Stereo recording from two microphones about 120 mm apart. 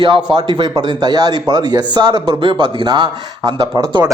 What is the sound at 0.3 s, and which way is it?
Speech, 40° right (ahead or behind).